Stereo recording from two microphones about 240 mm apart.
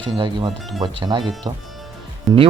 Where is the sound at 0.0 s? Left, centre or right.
Centre.